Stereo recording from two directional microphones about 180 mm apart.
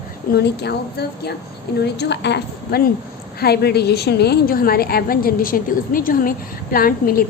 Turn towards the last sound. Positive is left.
turn(degrees=55)  # may be behind; listen again after turning